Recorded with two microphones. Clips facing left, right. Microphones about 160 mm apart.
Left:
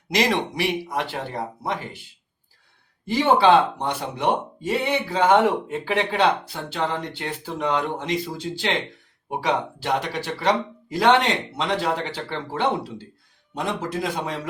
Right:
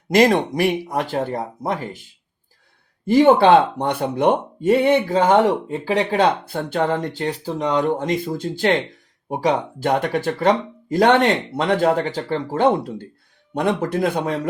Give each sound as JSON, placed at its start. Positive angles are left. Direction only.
{"t": 0.1, "sound": "speech", "side_deg": -45}
{"t": 3.1, "sound": "a man's voice", "side_deg": -50}